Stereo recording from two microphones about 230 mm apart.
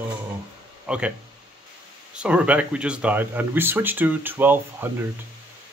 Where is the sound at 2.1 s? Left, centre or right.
Centre.